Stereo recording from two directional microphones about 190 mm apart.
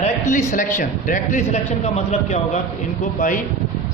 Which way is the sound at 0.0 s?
40° left (ahead or behind).